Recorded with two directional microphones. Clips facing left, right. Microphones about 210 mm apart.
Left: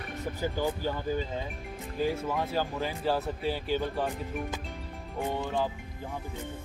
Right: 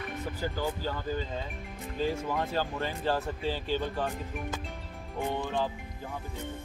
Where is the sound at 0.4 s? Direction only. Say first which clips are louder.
Left 3 dB; 15° left (ahead or behind).